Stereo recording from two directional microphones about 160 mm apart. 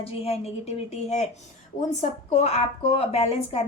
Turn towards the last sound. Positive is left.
turn(degrees=40)  # may be behind; listen again after turning